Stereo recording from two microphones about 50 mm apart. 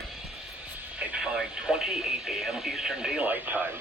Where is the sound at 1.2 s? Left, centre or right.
Centre.